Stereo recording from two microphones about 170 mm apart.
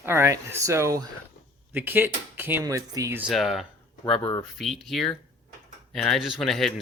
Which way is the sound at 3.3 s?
Centre (ahead or behind).